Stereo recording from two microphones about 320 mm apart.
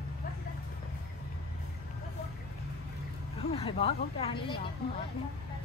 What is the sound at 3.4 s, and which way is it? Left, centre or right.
Speech, centre.